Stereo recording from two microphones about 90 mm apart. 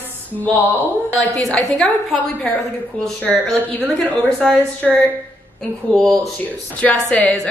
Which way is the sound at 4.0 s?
5° left (ahead or behind).